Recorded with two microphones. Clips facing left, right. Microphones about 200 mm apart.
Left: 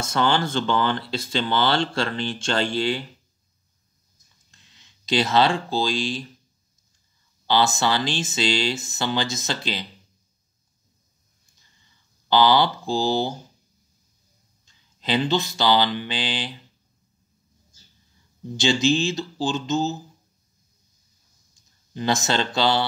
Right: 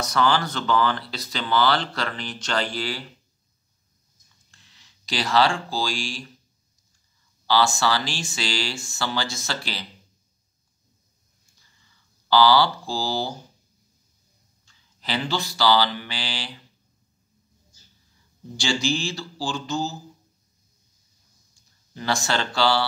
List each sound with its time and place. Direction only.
0.0 s speech: 25° left (ahead or behind)
4.5 s speech: 20° left (ahead or behind)
7.4 s speech: 20° left (ahead or behind)
12.3 s speech: 20° left (ahead or behind)
14.6 s mantra: 20° left (ahead or behind)
18.6 s speech: 20° left (ahead or behind)
21.9 s speech: 20° left (ahead or behind)